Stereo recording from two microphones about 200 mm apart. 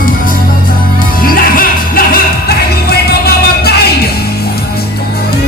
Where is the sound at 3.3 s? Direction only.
50° left (ahead or behind).